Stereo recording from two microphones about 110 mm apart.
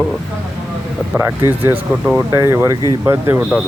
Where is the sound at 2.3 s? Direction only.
25° right (ahead or behind).